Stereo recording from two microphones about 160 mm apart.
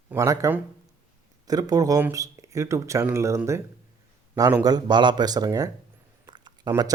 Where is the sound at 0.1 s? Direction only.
20° right (ahead or behind).